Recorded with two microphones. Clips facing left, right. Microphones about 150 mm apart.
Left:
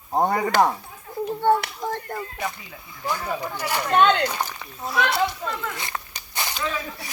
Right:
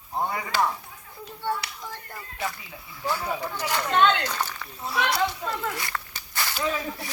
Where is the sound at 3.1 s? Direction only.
10° right (ahead or behind).